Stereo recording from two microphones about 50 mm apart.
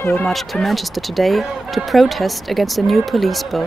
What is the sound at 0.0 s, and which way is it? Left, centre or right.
Speech, left.